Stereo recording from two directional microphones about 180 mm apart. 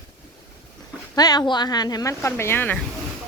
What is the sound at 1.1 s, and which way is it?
Speech, 20° left (ahead or behind).